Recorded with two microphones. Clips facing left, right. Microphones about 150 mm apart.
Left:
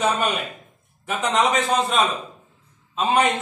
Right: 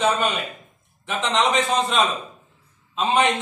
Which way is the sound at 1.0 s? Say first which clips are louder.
Left 1 dB; 5° left (ahead or behind).